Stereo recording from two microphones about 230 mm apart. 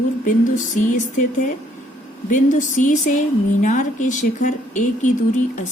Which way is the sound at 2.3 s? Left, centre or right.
Left.